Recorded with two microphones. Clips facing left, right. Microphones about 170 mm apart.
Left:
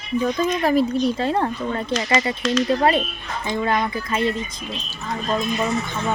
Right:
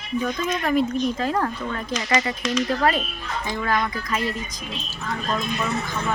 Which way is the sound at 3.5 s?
25° left (ahead or behind).